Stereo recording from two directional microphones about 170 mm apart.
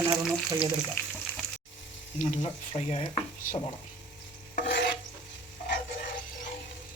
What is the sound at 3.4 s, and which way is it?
Speech, 55° left (ahead or behind).